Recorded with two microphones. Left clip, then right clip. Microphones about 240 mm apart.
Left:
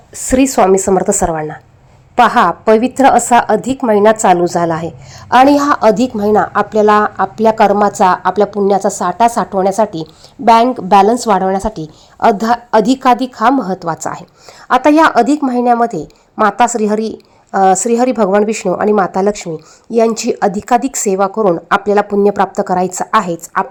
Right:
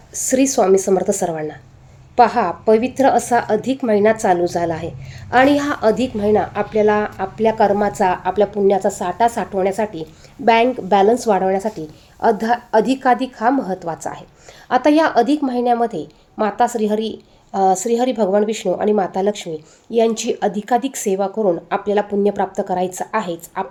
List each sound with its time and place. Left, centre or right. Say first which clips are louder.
0.1 s a woman's voice: left 4 dB; centre